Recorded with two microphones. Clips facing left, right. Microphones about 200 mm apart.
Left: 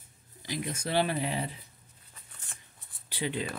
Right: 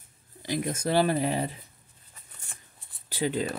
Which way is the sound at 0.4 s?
50° right (ahead or behind).